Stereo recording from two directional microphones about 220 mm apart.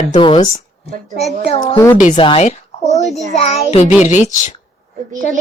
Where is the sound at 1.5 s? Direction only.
20° left (ahead or behind).